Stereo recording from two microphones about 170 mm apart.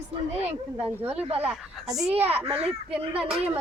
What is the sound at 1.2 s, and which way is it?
Speech, 35° right (ahead or behind).